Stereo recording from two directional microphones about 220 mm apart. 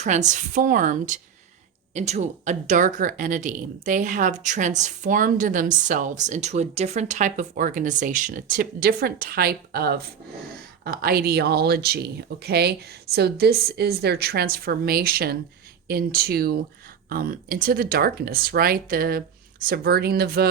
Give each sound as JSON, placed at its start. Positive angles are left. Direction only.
{"t": 0.0, "sound": "a woman's voice", "side_deg": -30}